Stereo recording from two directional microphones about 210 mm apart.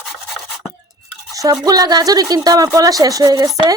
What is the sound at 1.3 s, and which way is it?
A woman's voice, 15° right (ahead or behind).